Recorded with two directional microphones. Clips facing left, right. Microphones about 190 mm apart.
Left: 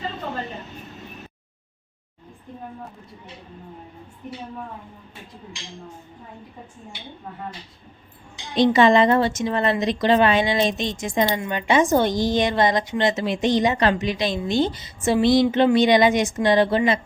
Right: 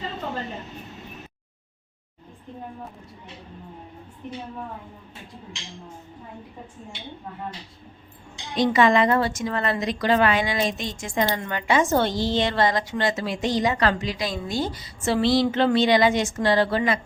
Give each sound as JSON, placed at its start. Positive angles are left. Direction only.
{"t": 8.5, "sound": "a woman's voice", "side_deg": 25}